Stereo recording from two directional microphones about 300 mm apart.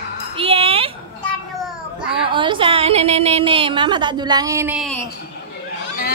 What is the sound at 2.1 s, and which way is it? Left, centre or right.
A woman's voice, centre.